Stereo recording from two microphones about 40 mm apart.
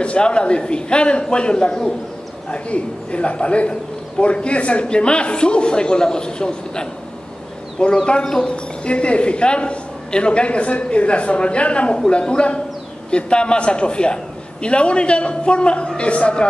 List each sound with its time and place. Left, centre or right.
0.0 s a man's voice: left
8.8 s a man's voice: left